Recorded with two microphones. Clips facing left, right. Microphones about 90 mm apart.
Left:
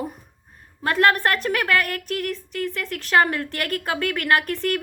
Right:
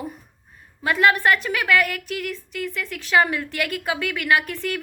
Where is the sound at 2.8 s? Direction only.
45° left (ahead or behind).